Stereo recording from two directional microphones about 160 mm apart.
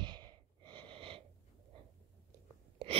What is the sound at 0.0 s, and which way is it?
Sneeze, 30° right (ahead or behind).